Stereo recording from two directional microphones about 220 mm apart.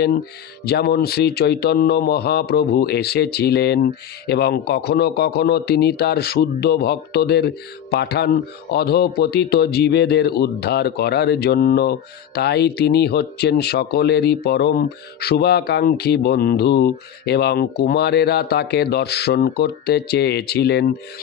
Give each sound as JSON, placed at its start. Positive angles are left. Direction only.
{"t": 0.7, "sound": "speech", "side_deg": 45}